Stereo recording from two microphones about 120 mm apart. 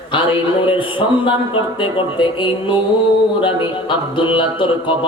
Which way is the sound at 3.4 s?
45° left (ahead or behind).